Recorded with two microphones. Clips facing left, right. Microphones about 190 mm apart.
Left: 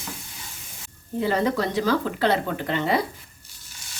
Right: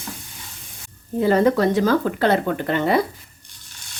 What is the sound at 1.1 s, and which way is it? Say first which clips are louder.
Speech: right 6 dB; 50° right (ahead or behind).